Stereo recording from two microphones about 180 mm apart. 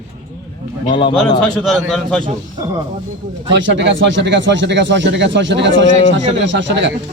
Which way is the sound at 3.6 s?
85° right.